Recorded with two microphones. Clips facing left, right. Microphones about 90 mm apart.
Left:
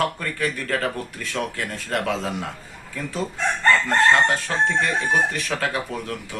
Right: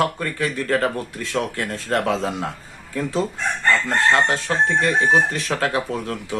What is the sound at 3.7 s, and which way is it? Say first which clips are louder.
Speech: even; 25° right (ahead or behind).